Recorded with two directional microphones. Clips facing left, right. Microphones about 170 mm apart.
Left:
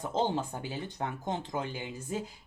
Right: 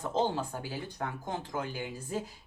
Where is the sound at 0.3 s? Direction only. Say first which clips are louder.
Left 1 dB; 20° left (ahead or behind).